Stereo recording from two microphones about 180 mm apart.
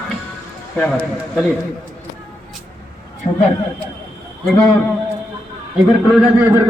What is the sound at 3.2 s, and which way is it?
Speech, 25° left (ahead or behind).